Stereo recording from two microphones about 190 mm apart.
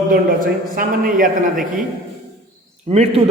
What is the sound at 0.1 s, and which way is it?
A man's voice, 50° right (ahead or behind).